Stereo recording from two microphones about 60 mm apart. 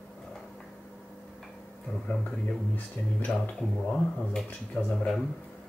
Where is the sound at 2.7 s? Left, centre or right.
Left.